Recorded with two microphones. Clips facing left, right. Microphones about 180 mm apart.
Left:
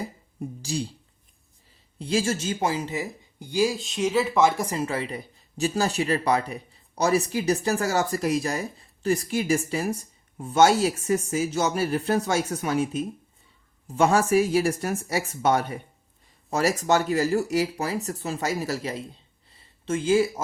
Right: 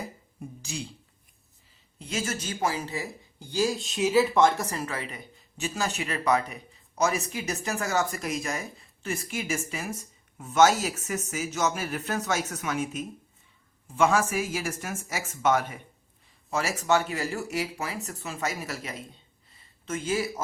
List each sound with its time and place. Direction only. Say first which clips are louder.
0.6 s speech: left 8 dB; 35° left (ahead or behind)
2.0 s speech: left 7 dB; 35° left (ahead or behind); by 3.8 s 10° left (ahead or behind)
3.8 s speech: right 1 dB; centre (ahead or behind)
4.7 s speech: left 6 dB; 25° left (ahead or behind)
19.5 s a sound: left 6 dB; 30° left (ahead or behind)